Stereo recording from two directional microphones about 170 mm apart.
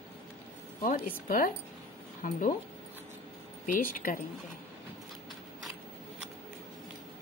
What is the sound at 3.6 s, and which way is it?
Speech, 50° left (ahead or behind).